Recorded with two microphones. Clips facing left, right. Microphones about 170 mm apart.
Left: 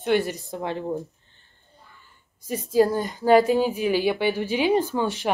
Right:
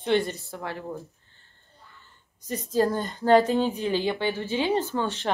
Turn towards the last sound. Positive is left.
turn(degrees=10)  # may be behind; listen again after turning